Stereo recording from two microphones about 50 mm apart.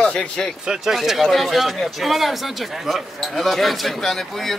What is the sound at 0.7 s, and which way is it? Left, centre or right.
Speech, centre.